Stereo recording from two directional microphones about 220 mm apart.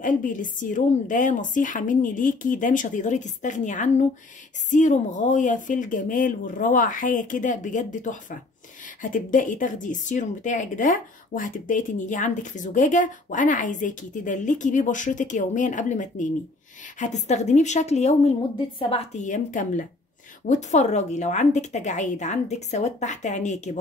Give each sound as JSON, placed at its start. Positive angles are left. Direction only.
{"t": 0.0, "sound": "speech", "side_deg": 35}